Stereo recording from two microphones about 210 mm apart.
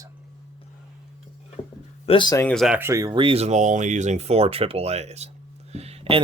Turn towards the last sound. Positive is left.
turn(degrees=-30)  # may be behind; listen again after turning